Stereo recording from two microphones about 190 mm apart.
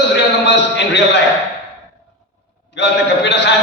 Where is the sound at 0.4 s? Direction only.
65° left (ahead or behind).